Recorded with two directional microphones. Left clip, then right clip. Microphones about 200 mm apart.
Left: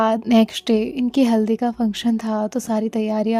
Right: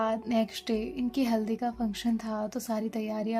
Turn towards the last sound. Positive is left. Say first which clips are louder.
# left 11 dB
turn(degrees=45)  # may be behind; listen again after turning